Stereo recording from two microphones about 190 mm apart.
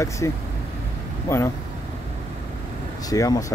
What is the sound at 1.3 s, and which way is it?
Speech, 15° left (ahead or behind).